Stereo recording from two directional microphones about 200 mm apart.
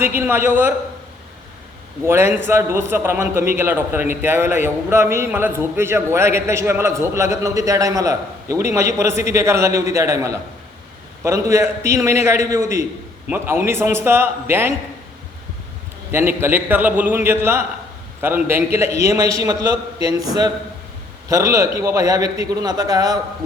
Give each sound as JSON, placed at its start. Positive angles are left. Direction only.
{"t": 0.0, "sound": "a man's voice", "side_deg": -10}
{"t": 2.0, "sound": "a man's voice", "side_deg": -10}
{"t": 16.1, "sound": "a man's voice", "side_deg": -10}
{"t": 21.2, "sound": "a man's voice", "side_deg": -15}